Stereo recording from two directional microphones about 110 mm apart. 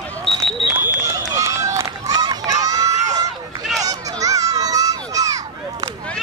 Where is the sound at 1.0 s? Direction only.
30° right (ahead or behind).